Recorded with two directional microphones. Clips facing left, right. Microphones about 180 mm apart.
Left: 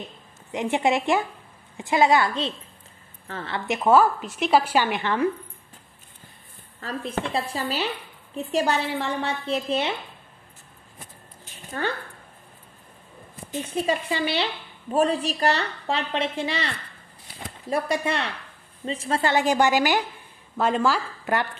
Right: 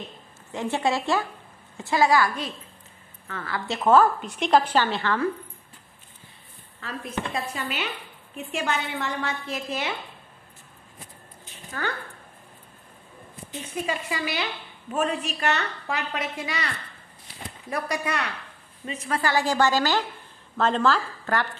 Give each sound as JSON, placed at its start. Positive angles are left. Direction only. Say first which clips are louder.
{"t": 0.5, "sound": "a woman's voice", "louder": "left 3 dB", "side_deg": 20}
{"t": 6.8, "sound": "a woman's voice", "louder": "left 3 dB", "side_deg": 35}
{"t": 11.8, "sound": "a woman's voice", "louder": "left 3 dB", "side_deg": 25}
{"t": 13.7, "sound": "a woman's voice", "louder": "left 4 dB", "side_deg": 30}